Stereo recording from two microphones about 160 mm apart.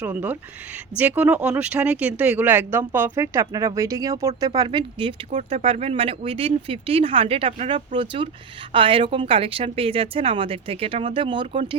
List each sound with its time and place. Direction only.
0.0 s speech: 10° right (ahead or behind); by 5.1 s 30° right (ahead or behind)
5.3 s a woman's voice: 45° right (ahead or behind); by 11.8 s 30° right (ahead or behind)